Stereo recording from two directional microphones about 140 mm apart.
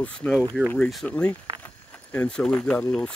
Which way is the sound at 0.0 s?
10° left (ahead or behind).